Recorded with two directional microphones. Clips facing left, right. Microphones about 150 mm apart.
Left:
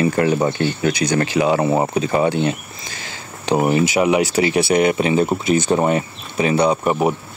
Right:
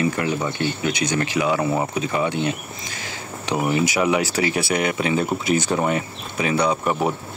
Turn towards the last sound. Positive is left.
turn(degrees=20)  # may be behind; listen again after turning